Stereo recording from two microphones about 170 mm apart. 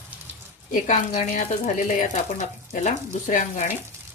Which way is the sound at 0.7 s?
45° left (ahead or behind).